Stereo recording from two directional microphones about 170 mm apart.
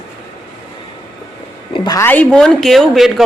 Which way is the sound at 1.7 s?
20° left (ahead or behind).